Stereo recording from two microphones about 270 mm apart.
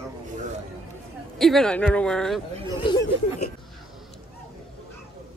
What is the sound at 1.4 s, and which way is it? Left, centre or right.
A woman's voice, centre.